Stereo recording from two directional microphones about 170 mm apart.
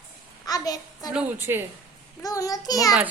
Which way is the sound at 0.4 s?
20° left (ahead or behind).